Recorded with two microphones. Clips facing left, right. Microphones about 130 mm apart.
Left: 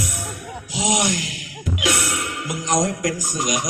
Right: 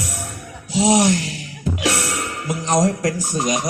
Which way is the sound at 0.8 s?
30° right (ahead or behind).